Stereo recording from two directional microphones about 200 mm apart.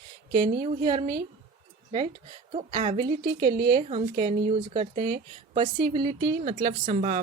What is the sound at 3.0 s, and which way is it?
Speech, 45° right (ahead or behind).